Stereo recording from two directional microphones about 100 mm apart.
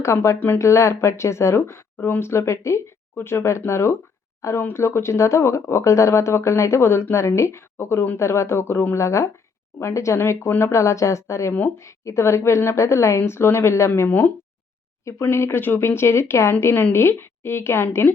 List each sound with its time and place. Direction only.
0.0 s speech: 30° left (ahead or behind)